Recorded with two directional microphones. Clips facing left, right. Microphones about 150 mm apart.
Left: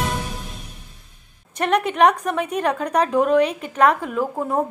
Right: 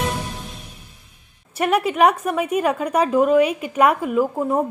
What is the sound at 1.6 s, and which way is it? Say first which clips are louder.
A woman's voice: even; 5° right (ahead or behind).